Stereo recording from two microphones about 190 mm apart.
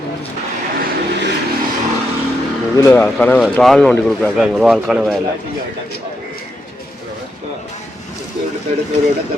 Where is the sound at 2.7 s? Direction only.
20° left (ahead or behind).